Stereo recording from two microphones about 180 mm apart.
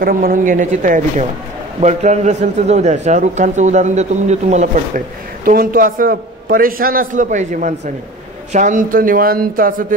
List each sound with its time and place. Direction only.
0.0 s a man's voice: 50° right (ahead or behind)